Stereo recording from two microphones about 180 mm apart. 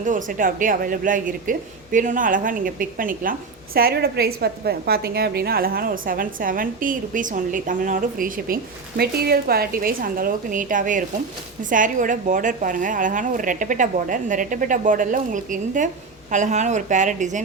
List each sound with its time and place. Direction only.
0.0 s a woman's voice: 45° right (ahead or behind)